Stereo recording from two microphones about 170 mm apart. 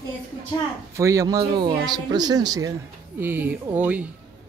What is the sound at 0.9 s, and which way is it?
Speech, 20° right (ahead or behind).